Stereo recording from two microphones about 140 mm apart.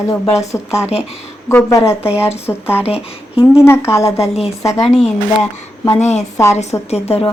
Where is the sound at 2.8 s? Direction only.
45° left (ahead or behind).